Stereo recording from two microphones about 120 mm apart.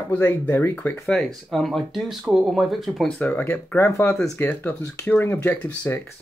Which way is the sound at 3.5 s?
15° left (ahead or behind).